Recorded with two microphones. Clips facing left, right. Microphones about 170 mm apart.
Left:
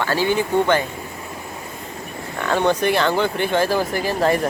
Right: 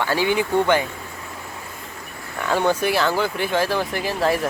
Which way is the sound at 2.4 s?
10° right (ahead or behind).